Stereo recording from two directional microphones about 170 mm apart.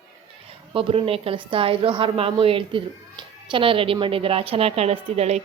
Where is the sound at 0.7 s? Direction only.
30° right (ahead or behind).